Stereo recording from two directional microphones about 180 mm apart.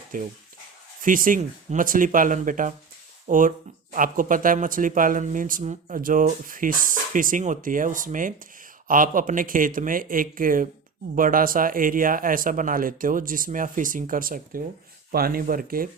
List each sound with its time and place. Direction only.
0.1 s speech: 45° right (ahead or behind)